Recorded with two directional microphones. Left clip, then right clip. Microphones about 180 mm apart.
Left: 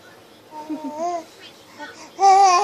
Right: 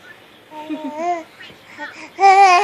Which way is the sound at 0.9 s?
40° right (ahead or behind).